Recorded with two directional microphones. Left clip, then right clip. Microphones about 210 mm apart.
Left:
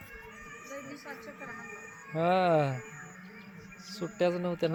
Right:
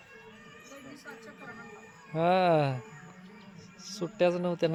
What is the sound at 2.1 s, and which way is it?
Speech, 15° right (ahead or behind).